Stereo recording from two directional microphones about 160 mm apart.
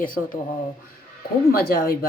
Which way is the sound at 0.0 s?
60° left (ahead or behind).